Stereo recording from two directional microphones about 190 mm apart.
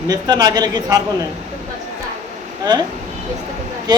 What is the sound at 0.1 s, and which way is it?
Speech, 20° right (ahead or behind).